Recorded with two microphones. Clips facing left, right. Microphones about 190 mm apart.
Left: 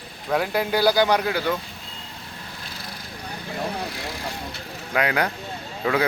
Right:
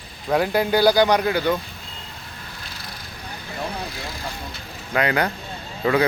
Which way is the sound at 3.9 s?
70° left (ahead or behind).